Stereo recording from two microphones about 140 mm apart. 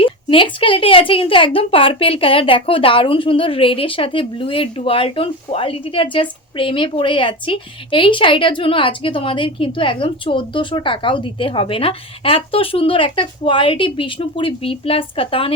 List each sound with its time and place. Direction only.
0.0 s a woman's voice: 40° left (ahead or behind)